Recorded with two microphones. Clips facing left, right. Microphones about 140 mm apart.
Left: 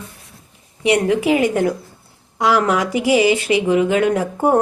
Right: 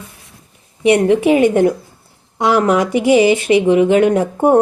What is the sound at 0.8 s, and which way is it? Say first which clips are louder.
Speech: right 4 dB; 25° right (ahead or behind).